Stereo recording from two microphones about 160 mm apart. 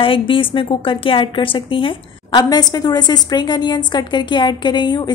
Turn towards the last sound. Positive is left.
turn(degrees=25)  # may be behind; listen again after turning